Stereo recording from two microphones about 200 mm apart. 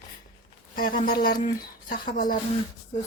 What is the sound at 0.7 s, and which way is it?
A woman's voice, 45° left (ahead or behind).